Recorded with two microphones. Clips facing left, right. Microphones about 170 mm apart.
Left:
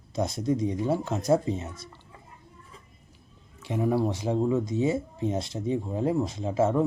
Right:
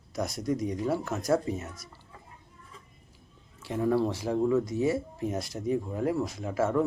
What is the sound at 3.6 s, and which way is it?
Speech, 15° left (ahead or behind).